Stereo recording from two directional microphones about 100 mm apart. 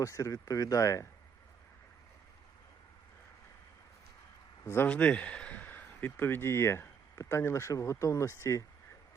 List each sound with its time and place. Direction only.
0.0 s speech: 30° left (ahead or behind)
4.6 s speech: 25° left (ahead or behind)
4.9 s speech: 10° left (ahead or behind); by 8.6 s 30° left (ahead or behind)